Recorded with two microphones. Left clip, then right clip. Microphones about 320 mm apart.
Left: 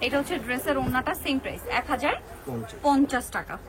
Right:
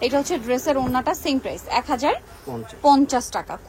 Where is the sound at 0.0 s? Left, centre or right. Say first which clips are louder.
Right 5 dB; centre.